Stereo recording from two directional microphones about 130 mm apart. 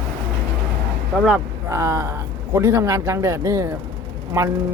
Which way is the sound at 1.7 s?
20° right (ahead or behind).